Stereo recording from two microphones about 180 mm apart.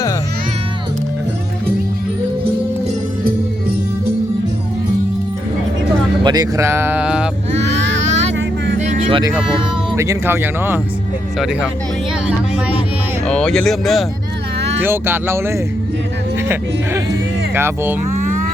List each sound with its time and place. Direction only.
6.2 s speech: 20° right (ahead or behind); by 7.3 s 5° right (ahead or behind)
7.5 s vehicle: 90° right
8.8 s music: 30° right (ahead or behind)
9.9 s speech: 15° right (ahead or behind)
13.2 s speech: 5° left (ahead or behind)
14.8 s speech: 10° right (ahead or behind)
17.5 s speech: 10° right (ahead or behind)